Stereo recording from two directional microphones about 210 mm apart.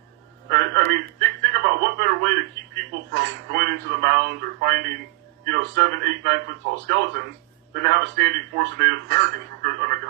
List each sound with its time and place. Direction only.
0.5 s telephone: 55° right (ahead or behind)
5.4 s a man's voice: 55° right (ahead or behind)